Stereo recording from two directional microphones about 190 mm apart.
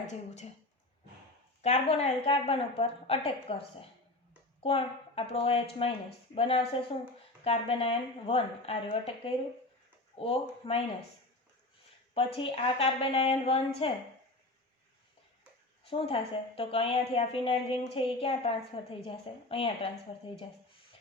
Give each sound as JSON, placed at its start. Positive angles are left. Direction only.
{"t": 1.6, "sound": "a woman's voice", "side_deg": 35}
{"t": 12.1, "sound": "a woman's voice", "side_deg": 30}
{"t": 15.8, "sound": "a woman's voice", "side_deg": 30}